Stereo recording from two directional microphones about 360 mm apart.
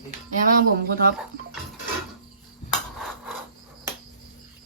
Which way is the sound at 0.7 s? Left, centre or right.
Right.